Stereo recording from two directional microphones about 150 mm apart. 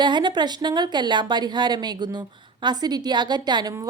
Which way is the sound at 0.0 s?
30° right (ahead or behind).